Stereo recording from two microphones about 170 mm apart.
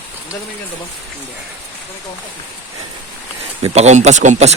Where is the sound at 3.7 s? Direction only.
40° right (ahead or behind).